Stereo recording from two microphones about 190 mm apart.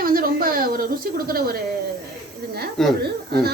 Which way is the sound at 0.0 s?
50° right (ahead or behind).